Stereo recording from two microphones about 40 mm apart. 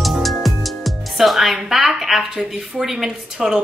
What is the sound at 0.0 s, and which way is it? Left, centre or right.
A woman's voice, centre.